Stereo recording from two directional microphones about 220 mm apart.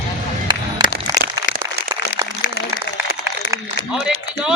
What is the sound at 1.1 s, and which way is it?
Crack, 15° right (ahead or behind).